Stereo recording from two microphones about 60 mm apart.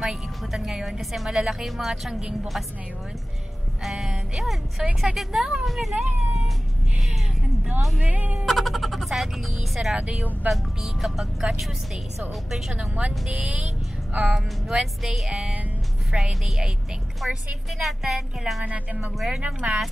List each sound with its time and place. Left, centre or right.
0.0 s a woman's voice: centre
3.8 s a woman's voice: centre
8.0 s speech: right
8.5 s speech: centre
9.9 s speech: centre
10.5 s a woman's voice: centre
12.7 s speech: right
14.7 s speech: centre
18.6 s speech: right
19.1 s speech: centre
19.4 s speech: right